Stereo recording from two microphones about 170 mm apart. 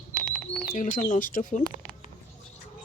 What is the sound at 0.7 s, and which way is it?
Speech, 55° left (ahead or behind).